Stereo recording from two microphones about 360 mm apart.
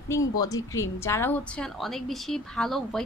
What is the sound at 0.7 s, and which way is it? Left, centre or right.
A woman's voice, centre.